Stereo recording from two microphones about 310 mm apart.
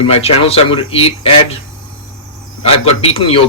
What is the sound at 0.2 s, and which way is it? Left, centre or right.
Speech, centre.